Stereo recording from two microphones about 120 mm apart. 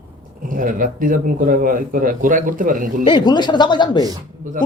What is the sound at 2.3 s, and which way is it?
Speech, 90° right.